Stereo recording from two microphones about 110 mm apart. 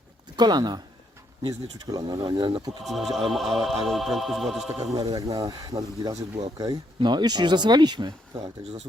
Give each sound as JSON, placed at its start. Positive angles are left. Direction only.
{"t": 0.3, "sound": "speech", "side_deg": -40}
{"t": 1.9, "sound": "speech", "side_deg": -35}
{"t": 2.1, "sound": "speech", "side_deg": -45}
{"t": 2.8, "sound": "music", "side_deg": 0}
{"t": 4.9, "sound": "speech", "side_deg": -35}
{"t": 6.1, "sound": "speech", "side_deg": -70}
{"t": 6.6, "sound": "speech", "side_deg": -40}